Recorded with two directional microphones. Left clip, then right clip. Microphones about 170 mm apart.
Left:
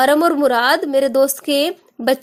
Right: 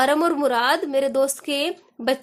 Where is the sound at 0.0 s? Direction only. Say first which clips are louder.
Left 5 dB; 30° left (ahead or behind).